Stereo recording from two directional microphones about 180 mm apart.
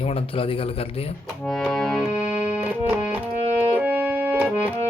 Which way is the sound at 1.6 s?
Centre (ahead or behind).